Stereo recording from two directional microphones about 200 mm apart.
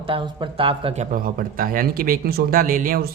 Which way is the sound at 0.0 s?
25° right (ahead or behind).